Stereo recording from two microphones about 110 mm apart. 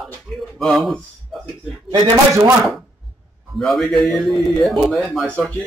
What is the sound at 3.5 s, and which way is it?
A man's voice, centre (ahead or behind).